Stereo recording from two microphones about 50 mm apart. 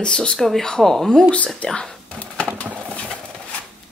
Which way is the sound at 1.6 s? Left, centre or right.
Centre.